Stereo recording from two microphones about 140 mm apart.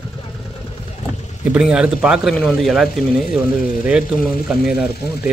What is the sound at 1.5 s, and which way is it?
Speech, 5° right (ahead or behind).